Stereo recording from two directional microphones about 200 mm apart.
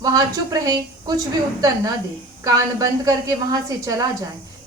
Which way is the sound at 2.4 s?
20° right (ahead or behind).